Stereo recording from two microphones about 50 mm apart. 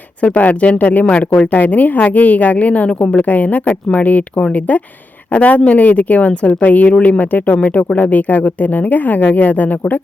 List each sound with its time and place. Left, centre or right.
0.2 s speech: left